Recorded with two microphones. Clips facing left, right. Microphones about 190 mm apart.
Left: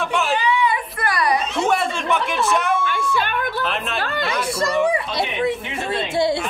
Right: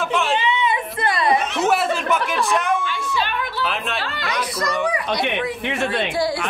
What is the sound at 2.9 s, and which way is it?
Music, 50° left (ahead or behind).